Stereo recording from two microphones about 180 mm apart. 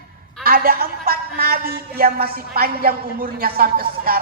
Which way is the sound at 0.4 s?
55° right (ahead or behind).